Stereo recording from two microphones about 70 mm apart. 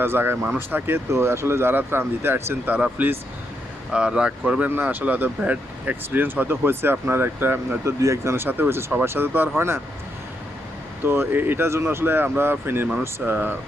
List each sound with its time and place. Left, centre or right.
0.0 s speech: right
1.1 s speech: right
2.7 s speech: centre
4.7 s speech: right
7.9 s speech: right
8.4 s speech: right
11.0 s speech: right